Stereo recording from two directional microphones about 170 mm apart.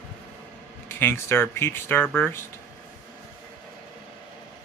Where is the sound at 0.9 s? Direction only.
15° left (ahead or behind).